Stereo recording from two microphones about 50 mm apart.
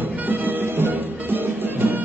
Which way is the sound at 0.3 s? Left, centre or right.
Right.